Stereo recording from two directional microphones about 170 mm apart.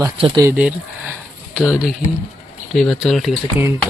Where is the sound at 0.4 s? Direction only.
10° right (ahead or behind).